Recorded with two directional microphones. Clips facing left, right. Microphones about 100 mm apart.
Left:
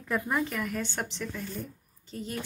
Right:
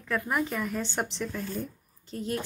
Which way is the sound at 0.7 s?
30° right (ahead or behind).